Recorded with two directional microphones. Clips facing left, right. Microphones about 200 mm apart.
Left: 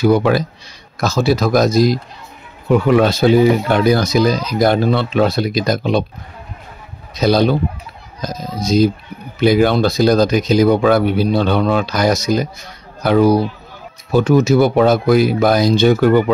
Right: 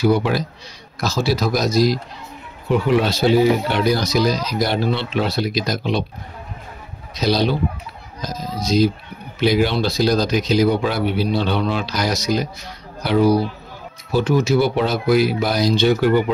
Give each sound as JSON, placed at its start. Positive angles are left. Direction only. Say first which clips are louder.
{"t": 0.0, "sound": "speech", "louder": "left 4 dB", "side_deg": 50}
{"t": 7.2, "sound": "speech", "louder": "left 5 dB", "side_deg": 55}
{"t": 8.6, "sound": "speech", "louder": "left 4 dB", "side_deg": 50}